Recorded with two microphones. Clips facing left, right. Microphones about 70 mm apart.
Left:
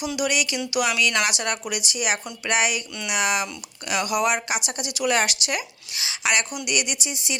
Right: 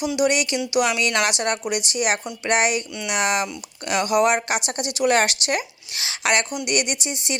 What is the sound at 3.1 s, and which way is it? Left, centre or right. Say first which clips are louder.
Speech: right 2 dB; right.